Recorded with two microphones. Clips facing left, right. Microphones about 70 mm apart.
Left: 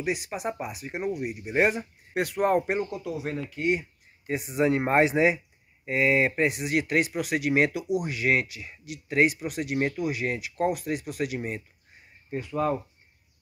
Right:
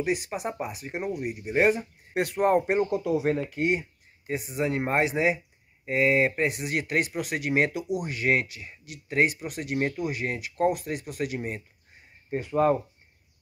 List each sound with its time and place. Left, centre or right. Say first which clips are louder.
0.0 s speech: right 1 dB; centre
3.0 s speech: right 6 dB; right
4.3 s speech: left 4 dB; centre
8.3 s speech: even; right
9.2 s speech: left 2 dB; centre
12.4 s speech: right 5 dB; right